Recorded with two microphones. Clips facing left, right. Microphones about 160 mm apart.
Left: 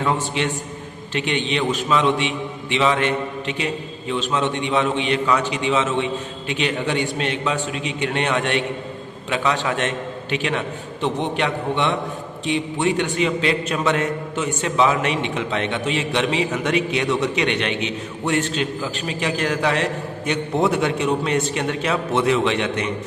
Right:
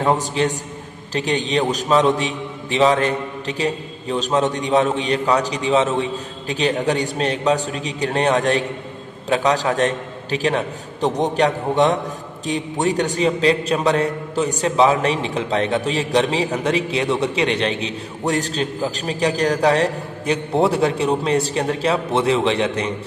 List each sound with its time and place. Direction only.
0.0 s a man's voice: 35° right (ahead or behind)